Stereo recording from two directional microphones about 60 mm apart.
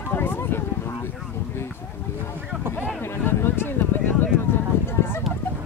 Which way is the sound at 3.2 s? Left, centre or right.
Left.